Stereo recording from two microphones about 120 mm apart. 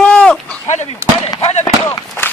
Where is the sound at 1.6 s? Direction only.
20° left (ahead or behind).